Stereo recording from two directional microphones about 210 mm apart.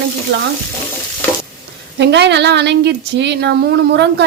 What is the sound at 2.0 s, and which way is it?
Speech, 55° right (ahead or behind).